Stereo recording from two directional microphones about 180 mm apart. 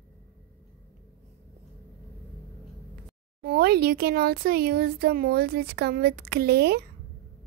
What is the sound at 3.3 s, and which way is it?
Speech, 60° right (ahead or behind).